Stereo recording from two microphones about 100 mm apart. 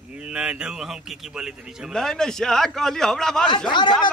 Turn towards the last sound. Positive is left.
turn(degrees=50)  # may be behind; listen again after turning